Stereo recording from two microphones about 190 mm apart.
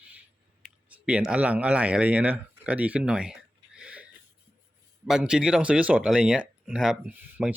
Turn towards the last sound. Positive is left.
turn(degrees=-5)  # may be behind; listen again after turning